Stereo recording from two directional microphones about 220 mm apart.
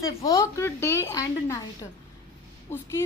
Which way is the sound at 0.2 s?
15° left (ahead or behind).